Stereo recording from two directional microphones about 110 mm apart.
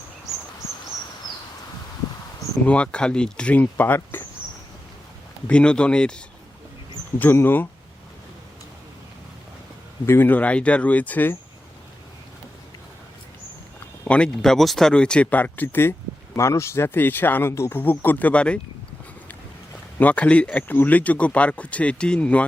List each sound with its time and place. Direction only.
2.6 s speech: 10° left (ahead or behind)
5.5 s speech: 10° left (ahead or behind)
7.2 s speech: 20° left (ahead or behind)
10.1 s speech: 15° left (ahead or behind)
14.0 s speech: 10° left (ahead or behind)
20.0 s speech: 10° left (ahead or behind)